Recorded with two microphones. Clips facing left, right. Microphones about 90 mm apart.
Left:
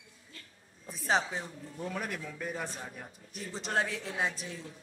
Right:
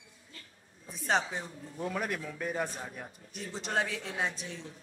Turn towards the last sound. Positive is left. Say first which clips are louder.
# left 1 dB
turn(degrees=0)  # may be behind; listen again after turning